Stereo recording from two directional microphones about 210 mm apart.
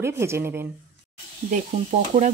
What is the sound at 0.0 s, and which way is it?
Speech, 10° right (ahead or behind).